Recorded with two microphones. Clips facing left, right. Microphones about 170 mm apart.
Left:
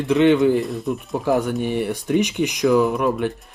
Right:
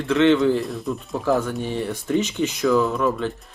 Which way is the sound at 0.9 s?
15° left (ahead or behind).